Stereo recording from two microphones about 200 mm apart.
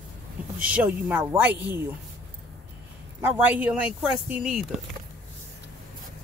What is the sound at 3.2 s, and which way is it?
Speech, 10° right (ahead or behind).